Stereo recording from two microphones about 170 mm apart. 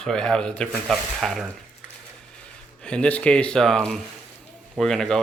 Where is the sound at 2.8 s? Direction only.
5° left (ahead or behind).